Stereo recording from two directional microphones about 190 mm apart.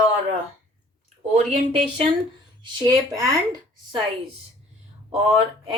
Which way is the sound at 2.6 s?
20° right (ahead or behind).